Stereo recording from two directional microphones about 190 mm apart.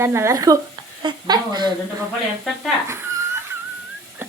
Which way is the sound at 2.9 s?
15° right (ahead or behind).